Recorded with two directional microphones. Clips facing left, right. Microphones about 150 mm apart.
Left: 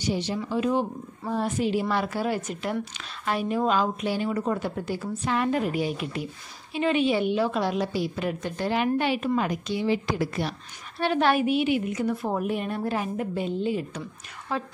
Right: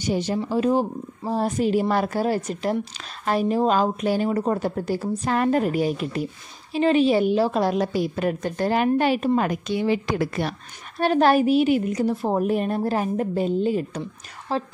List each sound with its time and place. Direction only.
0.0 s a woman's voice: 45° right (ahead or behind)
9.5 s a woman's voice: 55° right (ahead or behind)
11.0 s speech: 40° right (ahead or behind)